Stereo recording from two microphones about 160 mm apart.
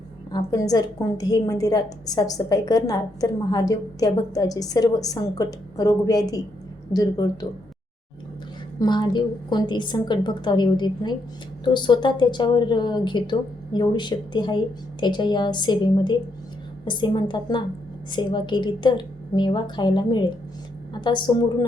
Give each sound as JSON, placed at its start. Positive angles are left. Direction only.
{"t": 0.3, "sound": "a woman's voice", "side_deg": 25}
{"t": 8.8, "sound": "a woman's voice", "side_deg": 25}